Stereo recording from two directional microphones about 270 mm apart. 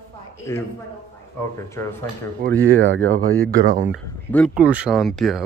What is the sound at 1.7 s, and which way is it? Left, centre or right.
Speech, centre.